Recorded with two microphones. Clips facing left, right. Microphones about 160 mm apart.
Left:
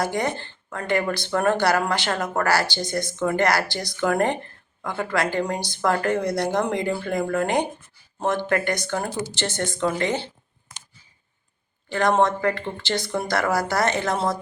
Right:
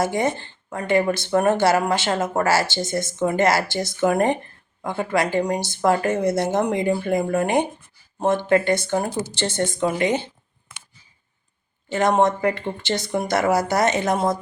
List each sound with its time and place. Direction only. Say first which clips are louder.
0.0 s speech: right 3 dB; 20° right (ahead or behind)
11.9 s speech: right 2 dB; 20° right (ahead or behind)